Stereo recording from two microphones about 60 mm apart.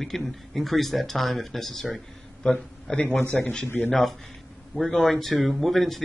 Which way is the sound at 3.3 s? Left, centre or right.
Left.